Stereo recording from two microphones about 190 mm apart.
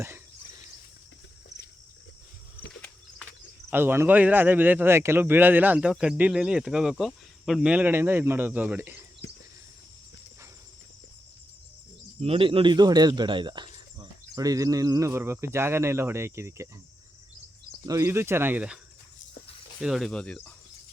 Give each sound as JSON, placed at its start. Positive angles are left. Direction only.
{"t": 0.0, "sound": "a sound", "side_deg": -15}
{"t": 3.7, "sound": "speech", "side_deg": -10}
{"t": 9.2, "sound": "a sound", "side_deg": 65}
{"t": 12.2, "sound": "speech", "side_deg": -30}
{"t": 17.8, "sound": "speech", "side_deg": -15}
{"t": 19.8, "sound": "speech", "side_deg": 0}